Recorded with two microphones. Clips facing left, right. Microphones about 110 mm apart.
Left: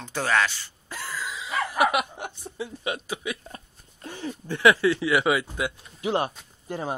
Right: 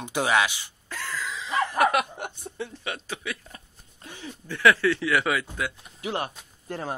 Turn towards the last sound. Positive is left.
turn(degrees=5)  # may be behind; listen again after turning